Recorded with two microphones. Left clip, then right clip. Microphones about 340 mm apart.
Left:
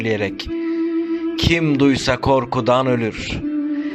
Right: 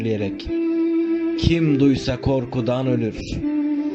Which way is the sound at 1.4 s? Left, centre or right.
Centre.